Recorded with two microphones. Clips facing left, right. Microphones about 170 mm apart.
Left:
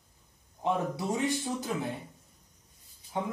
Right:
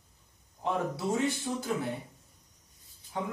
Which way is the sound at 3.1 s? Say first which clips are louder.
Left 2 dB; 20° left (ahead or behind).